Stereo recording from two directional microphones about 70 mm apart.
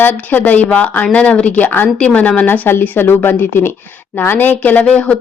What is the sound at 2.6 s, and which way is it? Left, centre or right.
A woman's voice, left.